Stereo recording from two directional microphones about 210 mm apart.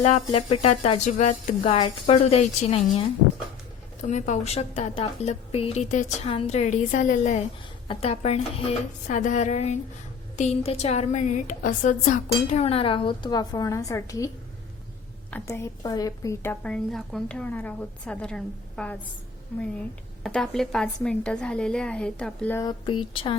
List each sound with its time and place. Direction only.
0.0 s speech: 30° left (ahead or behind)
4.0 s a woman's voice: 35° left (ahead or behind); by 14.3 s 15° left (ahead or behind)
15.3 s a woman's voice: 10° left (ahead or behind)
20.2 s a woman's voice: centre (ahead or behind)
22.6 s a woman's voice: 20° left (ahead or behind)